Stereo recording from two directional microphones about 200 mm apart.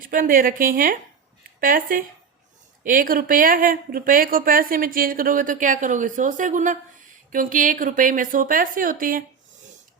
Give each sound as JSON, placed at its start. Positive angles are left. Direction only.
{"t": 0.0, "sound": "a woman's voice", "side_deg": -45}